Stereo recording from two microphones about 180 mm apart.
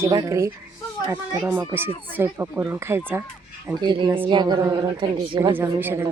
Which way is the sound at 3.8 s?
25° right (ahead or behind).